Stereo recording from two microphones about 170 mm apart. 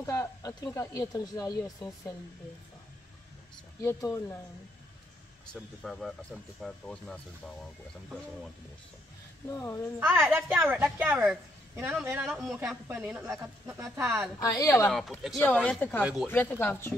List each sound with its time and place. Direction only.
0.0 s speech: 20° left (ahead or behind)
3.8 s speech: 15° left (ahead or behind)
5.5 s speech: centre (ahead or behind)
9.5 s speech: 15° left (ahead or behind)
9.9 s speech: 15° right (ahead or behind)
12.3 s speech: centre (ahead or behind)
12.5 s speech: 10° right (ahead or behind)
14.4 s speech: 20° left (ahead or behind)
14.9 s speech: centre (ahead or behind)
16.0 s speech: 5° right (ahead or behind)
16.3 s speech: 10° left (ahead or behind)